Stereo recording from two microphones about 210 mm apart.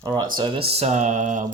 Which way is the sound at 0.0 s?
20° right (ahead or behind).